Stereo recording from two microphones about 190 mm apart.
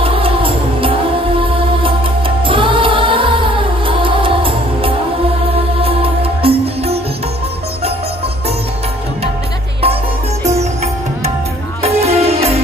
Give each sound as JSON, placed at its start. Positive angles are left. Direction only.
{"t": 0.0, "sound": "music", "side_deg": -30}
{"t": 11.8, "sound": "music", "side_deg": -30}